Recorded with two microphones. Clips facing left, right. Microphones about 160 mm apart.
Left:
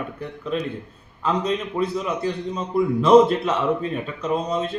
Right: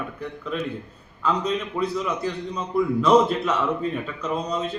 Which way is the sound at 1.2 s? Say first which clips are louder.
Left 1 dB; 30° left (ahead or behind).